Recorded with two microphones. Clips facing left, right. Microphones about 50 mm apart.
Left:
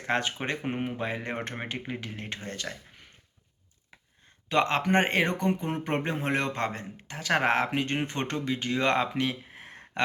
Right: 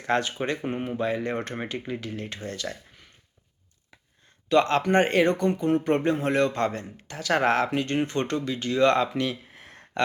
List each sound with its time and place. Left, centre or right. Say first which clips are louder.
0.1 s speech: right 3 dB; left
0.6 s speech: right 3 dB; centre
4.4 s speech: right 4 dB; left